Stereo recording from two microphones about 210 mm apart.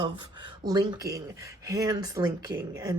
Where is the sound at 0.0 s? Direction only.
25° right (ahead or behind).